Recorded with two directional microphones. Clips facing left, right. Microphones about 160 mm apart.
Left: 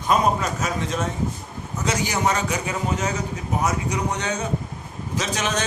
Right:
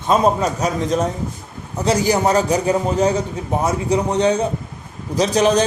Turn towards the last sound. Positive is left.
turn(degrees=-35)  # may be behind; listen again after turning